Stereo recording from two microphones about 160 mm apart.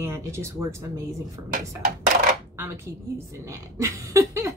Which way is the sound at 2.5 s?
15° right (ahead or behind).